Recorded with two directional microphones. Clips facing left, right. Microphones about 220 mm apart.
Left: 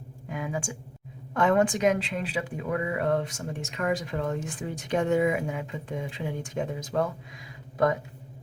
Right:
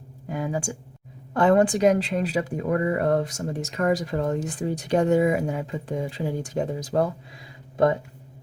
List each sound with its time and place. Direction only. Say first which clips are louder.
0.3 s speech: right 4 dB; 35° right (ahead or behind)